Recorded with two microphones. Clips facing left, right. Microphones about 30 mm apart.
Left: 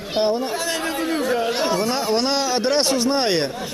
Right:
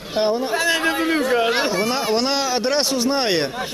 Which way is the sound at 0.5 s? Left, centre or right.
Centre.